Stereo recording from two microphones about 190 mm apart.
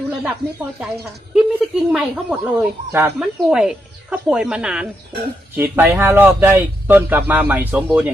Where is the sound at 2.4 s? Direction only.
10° right (ahead or behind).